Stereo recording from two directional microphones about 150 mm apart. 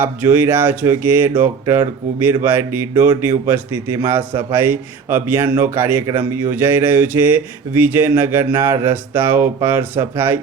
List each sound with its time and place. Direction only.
0.0 s speech: 10° right (ahead or behind)